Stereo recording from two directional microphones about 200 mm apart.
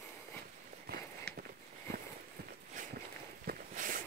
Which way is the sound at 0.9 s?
50° right (ahead or behind).